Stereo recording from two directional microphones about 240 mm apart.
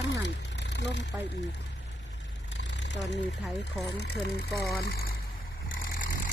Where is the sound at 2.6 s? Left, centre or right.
Left.